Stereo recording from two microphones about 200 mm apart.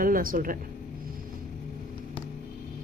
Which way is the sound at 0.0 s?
45° right (ahead or behind).